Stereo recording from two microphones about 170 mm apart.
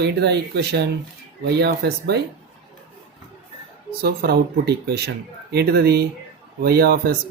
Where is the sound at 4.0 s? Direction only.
65° right (ahead or behind).